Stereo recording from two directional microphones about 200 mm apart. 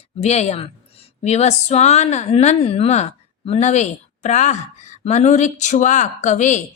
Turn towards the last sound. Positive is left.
turn(degrees=35)  # may be behind; listen again after turning